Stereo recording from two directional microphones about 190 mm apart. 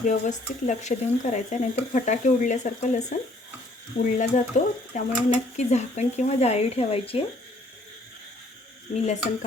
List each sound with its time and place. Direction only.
0.0 s speech: 40° left (ahead or behind)